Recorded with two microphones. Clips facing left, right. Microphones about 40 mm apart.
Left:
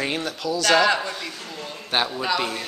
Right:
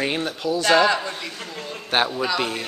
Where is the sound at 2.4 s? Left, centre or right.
Centre.